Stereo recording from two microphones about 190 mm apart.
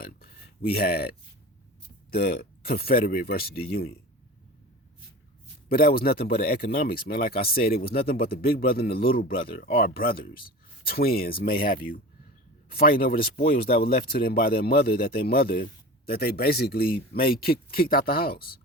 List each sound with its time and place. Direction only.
0.0 s a sound: 50° left (ahead or behind)
2.0 s speech: 55° left (ahead or behind)
5.6 s speech: 50° left (ahead or behind)